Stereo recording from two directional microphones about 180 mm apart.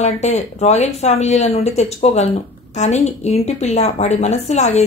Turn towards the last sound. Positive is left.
turn(degrees=40)  # may be behind; listen again after turning